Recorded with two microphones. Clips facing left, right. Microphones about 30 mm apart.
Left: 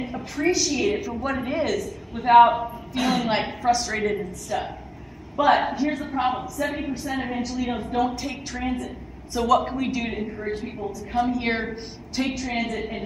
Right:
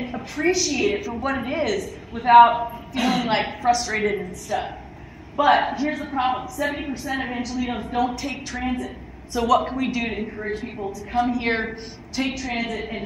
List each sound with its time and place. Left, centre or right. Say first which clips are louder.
0.0 s a woman's voice: right 1 dB; centre
2.2 s a woman's voice: right 2 dB; centre
4.0 s a woman's voice: right 2 dB; centre
4.5 s a woman's voice: right 3 dB; centre
7.2 s a woman's voice: even; centre
7.4 s a woman's voice: right 1 dB; centre
10.0 s a woman's voice: right 1 dB; centre
10.4 s a woman's voice: right 1 dB; centre